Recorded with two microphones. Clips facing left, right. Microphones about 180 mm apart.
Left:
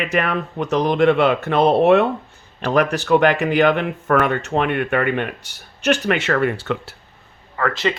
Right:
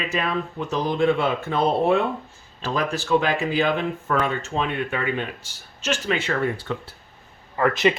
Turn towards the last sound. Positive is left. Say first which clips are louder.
# right 2 dB
turn(degrees=-20)  # may be behind; listen again after turning